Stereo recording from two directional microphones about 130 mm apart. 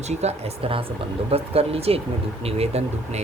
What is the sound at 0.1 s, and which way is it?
Speech, 55° right (ahead or behind).